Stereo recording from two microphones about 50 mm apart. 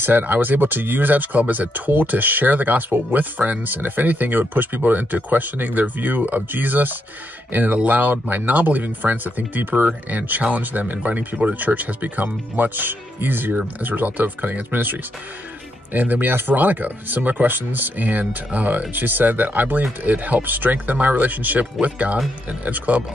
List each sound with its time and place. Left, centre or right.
0.0 s speech: right